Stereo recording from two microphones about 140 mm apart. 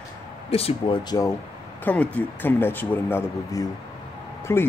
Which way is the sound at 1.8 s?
10° left (ahead or behind).